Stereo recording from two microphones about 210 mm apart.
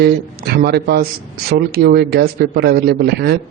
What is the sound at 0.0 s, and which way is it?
A man's voice, 50° right (ahead or behind).